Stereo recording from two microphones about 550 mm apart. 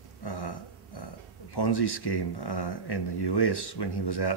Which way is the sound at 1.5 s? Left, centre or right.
Left.